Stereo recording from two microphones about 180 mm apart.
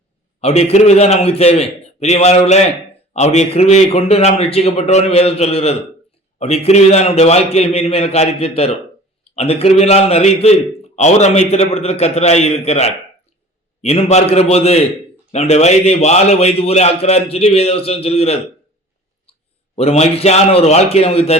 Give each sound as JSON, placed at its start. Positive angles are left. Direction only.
{"t": 0.4, "sound": "a man's voice", "side_deg": 35}
{"t": 19.7, "sound": "a man's voice", "side_deg": 35}